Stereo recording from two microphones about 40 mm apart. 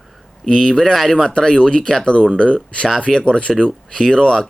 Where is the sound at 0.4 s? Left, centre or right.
Centre.